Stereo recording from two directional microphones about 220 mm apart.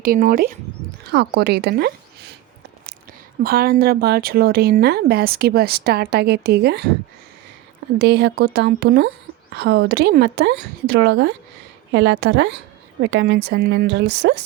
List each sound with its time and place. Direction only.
0.0 s speech: 40° right (ahead or behind)
3.4 s speech: 45° right (ahead or behind)
7.9 s speech: 50° right (ahead or behind)